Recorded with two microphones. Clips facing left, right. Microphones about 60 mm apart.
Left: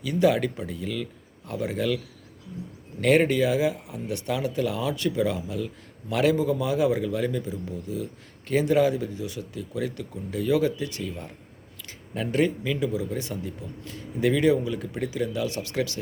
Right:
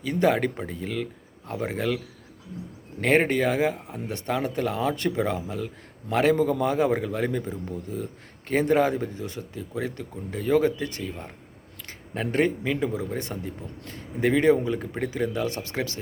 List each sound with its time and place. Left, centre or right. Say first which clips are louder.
0.0 s speech: even; right
3.0 s speech: left 1 dB; right